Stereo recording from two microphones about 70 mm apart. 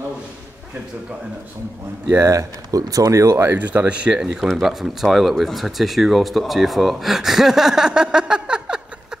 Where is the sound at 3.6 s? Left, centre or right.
Right.